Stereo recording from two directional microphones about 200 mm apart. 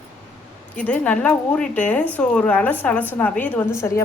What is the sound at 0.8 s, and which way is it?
A woman's voice, 5° left (ahead or behind).